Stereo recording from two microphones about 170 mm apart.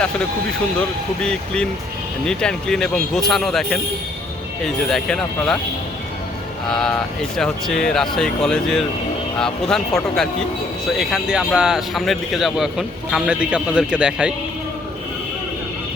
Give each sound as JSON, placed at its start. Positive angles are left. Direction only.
{"t": 0.8, "sound": "speech", "side_deg": 5}
{"t": 6.7, "sound": "speech", "side_deg": 0}